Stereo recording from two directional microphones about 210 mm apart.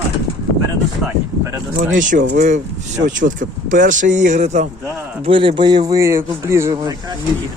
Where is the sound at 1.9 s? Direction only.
40° right (ahead or behind); by 6.9 s 15° right (ahead or behind).